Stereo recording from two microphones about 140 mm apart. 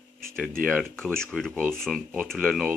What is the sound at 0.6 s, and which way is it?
Speech, 5° left (ahead or behind).